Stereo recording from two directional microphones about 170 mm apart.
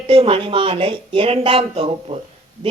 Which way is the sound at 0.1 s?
30° right (ahead or behind).